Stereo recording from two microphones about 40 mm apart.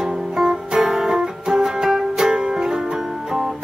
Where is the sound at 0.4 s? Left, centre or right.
Centre.